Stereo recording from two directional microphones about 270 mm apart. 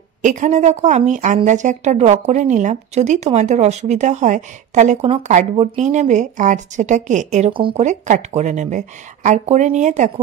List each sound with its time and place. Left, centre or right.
0.2 s speech: right